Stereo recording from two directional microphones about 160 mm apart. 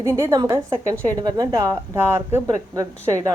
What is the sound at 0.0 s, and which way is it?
A woman's voice, 15° right (ahead or behind).